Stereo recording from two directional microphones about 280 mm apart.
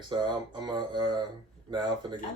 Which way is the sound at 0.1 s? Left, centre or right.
Centre.